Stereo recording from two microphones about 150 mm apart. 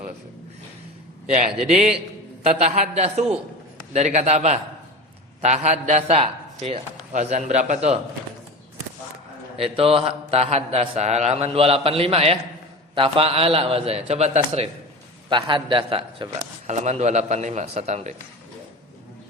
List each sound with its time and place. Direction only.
1.3 s a man's voice: 50° right (ahead or behind)
9.6 s a man's voice: 40° right (ahead or behind)
15.3 s a man's voice: 30° right (ahead or behind)
16.6 s a man's voice: 50° right (ahead or behind)